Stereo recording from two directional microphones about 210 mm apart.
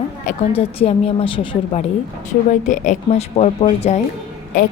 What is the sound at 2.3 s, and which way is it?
A woman's voice, 35° left (ahead or behind).